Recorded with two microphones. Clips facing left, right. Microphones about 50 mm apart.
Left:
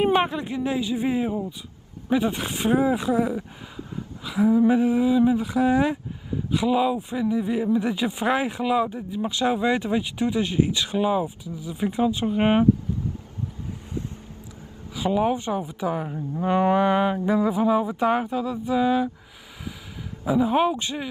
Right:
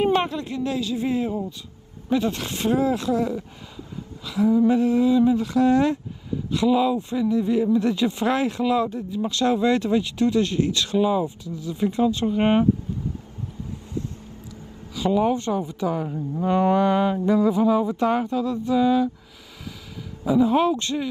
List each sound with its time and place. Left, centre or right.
0.0 s speech: centre
15.0 s speech: centre
20.2 s speech: centre